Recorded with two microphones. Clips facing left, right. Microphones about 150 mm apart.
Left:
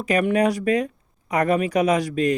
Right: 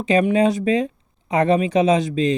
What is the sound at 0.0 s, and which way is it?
Speech, 25° right (ahead or behind).